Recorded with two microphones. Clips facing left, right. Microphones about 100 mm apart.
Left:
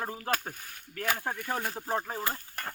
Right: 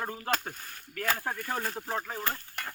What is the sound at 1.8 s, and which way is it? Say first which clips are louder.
Speech: left 2 dB; 20° left (ahead or behind).